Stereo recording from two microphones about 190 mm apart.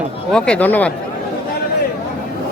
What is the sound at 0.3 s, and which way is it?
Speech, 5° left (ahead or behind).